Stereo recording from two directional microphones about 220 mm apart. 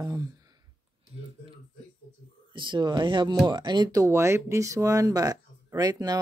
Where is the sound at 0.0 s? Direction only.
15° right (ahead or behind).